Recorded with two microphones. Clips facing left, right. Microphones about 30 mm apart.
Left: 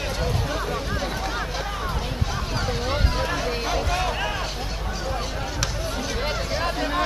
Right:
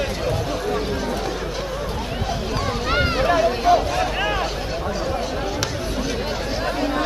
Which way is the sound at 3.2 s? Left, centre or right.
Centre.